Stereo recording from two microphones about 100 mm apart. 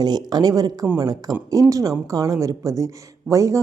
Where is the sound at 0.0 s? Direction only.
45° right (ahead or behind).